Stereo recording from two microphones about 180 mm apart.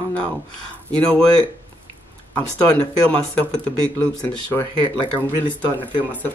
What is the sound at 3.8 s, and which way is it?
Speech, 10° left (ahead or behind).